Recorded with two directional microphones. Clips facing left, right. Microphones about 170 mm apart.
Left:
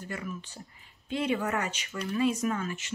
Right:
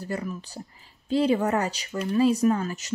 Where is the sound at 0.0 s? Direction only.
35° right (ahead or behind).